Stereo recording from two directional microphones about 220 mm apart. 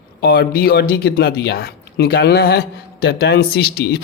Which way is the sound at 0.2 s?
45° left (ahead or behind).